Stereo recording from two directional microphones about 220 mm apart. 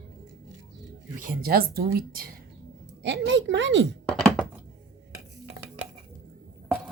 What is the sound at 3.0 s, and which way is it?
Speech, 55° right (ahead or behind).